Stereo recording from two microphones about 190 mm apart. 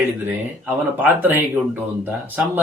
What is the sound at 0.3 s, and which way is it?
Speech, 10° right (ahead or behind).